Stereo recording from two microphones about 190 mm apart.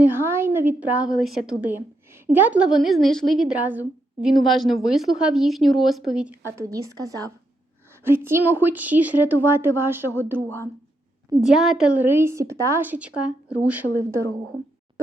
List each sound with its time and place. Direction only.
0.0 s a woman's voice: 10° right (ahead or behind)